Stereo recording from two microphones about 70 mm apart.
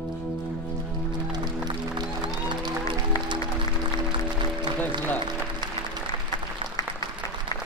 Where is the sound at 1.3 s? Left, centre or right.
Right.